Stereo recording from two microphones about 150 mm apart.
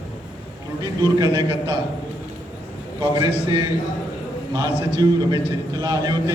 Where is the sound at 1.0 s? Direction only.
30° right (ahead or behind).